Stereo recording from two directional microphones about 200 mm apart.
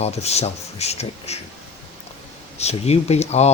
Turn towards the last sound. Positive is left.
turn(degrees=30)  # may be behind; listen again after turning